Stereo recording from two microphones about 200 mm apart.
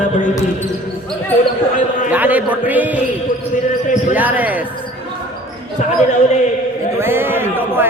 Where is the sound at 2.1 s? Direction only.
10° right (ahead or behind).